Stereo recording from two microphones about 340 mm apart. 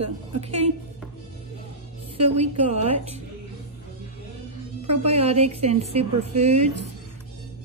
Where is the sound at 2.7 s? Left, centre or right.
Centre.